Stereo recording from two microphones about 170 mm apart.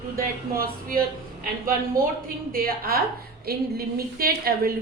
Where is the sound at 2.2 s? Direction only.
60° right (ahead or behind).